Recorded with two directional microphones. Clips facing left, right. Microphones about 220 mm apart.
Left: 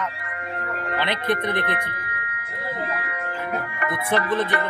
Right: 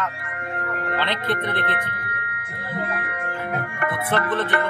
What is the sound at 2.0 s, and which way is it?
Music, 50° right (ahead or behind).